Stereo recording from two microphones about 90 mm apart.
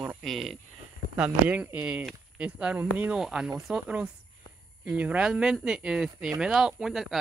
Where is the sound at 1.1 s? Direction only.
15° right (ahead or behind).